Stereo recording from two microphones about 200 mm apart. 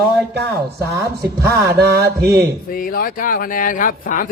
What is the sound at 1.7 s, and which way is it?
Mantra, 50° right (ahead or behind).